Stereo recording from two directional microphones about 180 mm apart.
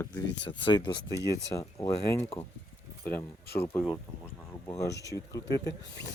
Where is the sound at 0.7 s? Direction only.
25° left (ahead or behind).